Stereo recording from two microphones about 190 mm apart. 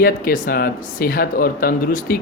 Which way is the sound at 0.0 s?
50° left (ahead or behind).